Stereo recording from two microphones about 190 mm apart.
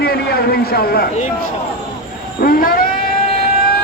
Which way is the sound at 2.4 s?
50° left (ahead or behind).